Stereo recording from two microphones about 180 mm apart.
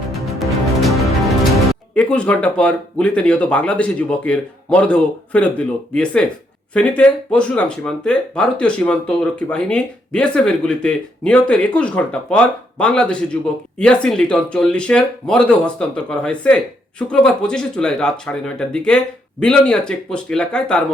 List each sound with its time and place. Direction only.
0.1 s music: centre (ahead or behind)
6.7 s speech: 5° left (ahead or behind)